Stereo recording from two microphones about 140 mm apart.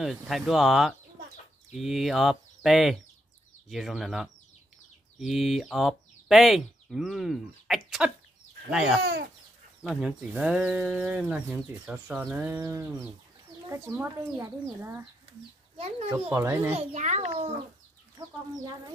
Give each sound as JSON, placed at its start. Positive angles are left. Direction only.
{"t": 0.0, "sound": "speech", "side_deg": 0}
{"t": 16.1, "sound": "speech", "side_deg": -20}
{"t": 16.7, "sound": "a child's voice", "side_deg": -55}